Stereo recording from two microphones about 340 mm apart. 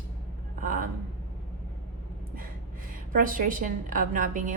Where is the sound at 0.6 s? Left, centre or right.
Right.